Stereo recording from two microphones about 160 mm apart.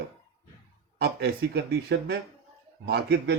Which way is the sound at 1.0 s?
85° right.